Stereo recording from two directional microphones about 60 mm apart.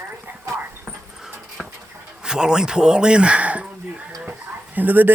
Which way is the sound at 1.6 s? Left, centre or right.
Centre.